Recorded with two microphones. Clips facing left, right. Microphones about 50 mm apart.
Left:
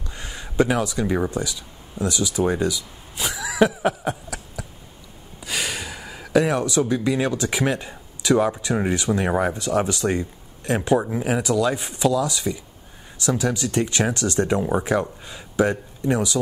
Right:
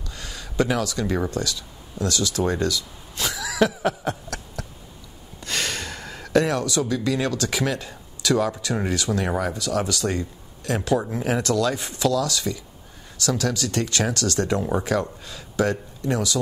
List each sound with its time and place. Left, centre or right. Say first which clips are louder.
0.1 s speech: left 2 dB; left
11.1 s speech: left 1 dB; centre